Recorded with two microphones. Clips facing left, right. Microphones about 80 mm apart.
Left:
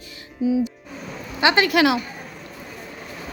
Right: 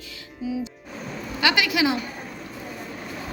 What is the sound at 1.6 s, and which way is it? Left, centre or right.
Speech, left.